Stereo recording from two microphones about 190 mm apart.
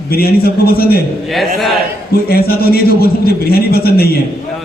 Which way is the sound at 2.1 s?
55° left (ahead or behind).